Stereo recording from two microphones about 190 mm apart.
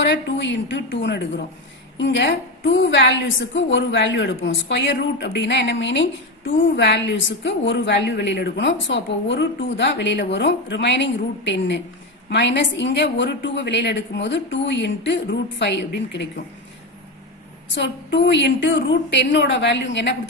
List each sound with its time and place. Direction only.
0.0 s a woman's voice: 65° left (ahead or behind)
17.7 s a woman's voice: 65° left (ahead or behind)